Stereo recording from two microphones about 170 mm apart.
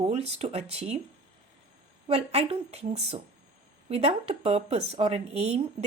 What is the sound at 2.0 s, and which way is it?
Speech, 35° right (ahead or behind).